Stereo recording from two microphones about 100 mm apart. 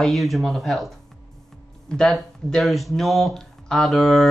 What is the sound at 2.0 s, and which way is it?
Speech, 5° left (ahead or behind).